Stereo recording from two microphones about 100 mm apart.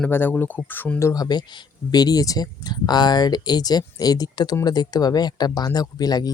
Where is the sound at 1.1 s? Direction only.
45° left (ahead or behind).